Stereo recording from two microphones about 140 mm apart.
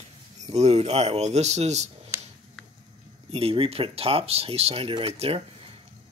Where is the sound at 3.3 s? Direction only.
45° right (ahead or behind).